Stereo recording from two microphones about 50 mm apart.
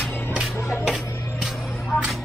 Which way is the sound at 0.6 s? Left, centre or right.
Left.